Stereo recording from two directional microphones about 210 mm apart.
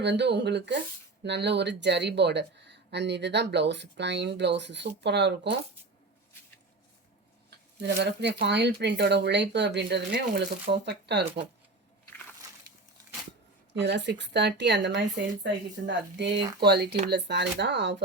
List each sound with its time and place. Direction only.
0.0 s speech: 55° right (ahead or behind)
7.8 s speech: 50° right (ahead or behind)
13.7 s speech: 55° right (ahead or behind)